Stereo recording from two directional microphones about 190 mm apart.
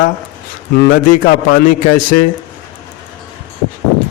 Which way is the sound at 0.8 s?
45° left (ahead or behind).